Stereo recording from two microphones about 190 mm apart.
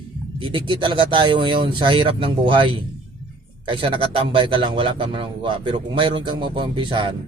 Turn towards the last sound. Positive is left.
turn(degrees=-25)  # may be behind; listen again after turning